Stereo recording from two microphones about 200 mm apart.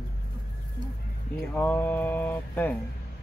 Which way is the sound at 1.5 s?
10° left (ahead or behind).